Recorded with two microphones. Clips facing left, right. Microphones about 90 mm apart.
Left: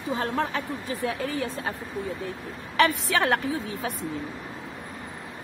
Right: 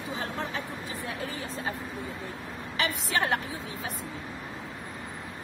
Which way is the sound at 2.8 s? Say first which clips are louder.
Left 7 dB; 70° left (ahead or behind).